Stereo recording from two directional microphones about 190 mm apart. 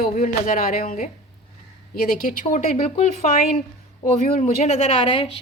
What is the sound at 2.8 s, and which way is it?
Speech, 30° left (ahead or behind).